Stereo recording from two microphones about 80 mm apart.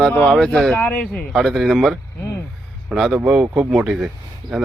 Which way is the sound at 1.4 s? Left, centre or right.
Centre.